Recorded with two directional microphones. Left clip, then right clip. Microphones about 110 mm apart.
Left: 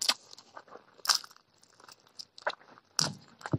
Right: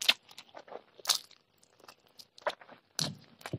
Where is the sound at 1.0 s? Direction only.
15° right (ahead or behind).